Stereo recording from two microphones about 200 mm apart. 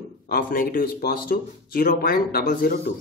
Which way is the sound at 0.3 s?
45° left (ahead or behind).